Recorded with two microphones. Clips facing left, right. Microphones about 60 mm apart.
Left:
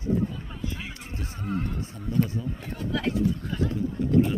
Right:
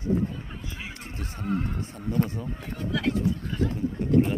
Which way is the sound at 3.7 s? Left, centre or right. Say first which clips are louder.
Even; right.